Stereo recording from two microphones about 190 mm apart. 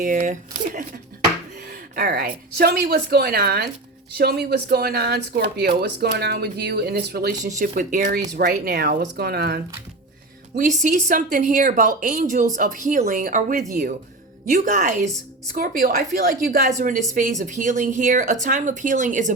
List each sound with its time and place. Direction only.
0.0 s speech: 45° right (ahead or behind)
2.0 s speech: 50° right (ahead or behind)
7.4 s speech: 40° right (ahead or behind)
10.6 s speech: 40° right (ahead or behind)
14.6 s a woman's voice: 40° right (ahead or behind)
15.5 s speech: 50° right (ahead or behind)